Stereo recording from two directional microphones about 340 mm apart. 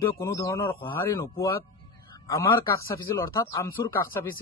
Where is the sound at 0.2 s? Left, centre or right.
Centre.